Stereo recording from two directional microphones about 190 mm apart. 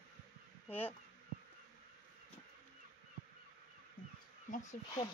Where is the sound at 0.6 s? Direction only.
10° left (ahead or behind).